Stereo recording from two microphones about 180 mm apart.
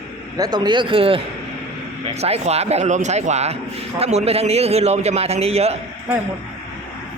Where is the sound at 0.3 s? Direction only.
20° right (ahead or behind).